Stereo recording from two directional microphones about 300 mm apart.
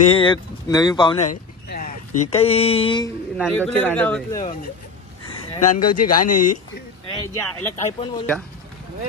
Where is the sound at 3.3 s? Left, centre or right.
Centre.